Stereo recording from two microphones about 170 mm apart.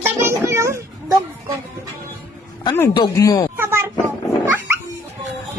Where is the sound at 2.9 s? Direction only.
20° left (ahead or behind).